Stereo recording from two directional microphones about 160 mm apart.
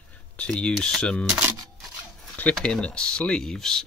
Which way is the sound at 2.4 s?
5° left (ahead or behind).